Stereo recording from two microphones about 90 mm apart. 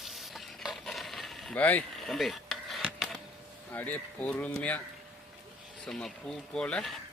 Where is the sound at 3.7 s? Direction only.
20° left (ahead or behind).